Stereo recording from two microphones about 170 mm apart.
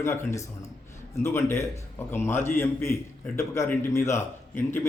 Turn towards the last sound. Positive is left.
turn(degrees=15)  # may be behind; listen again after turning